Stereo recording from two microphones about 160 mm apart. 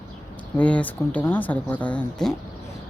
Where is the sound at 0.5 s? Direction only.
10° left (ahead or behind).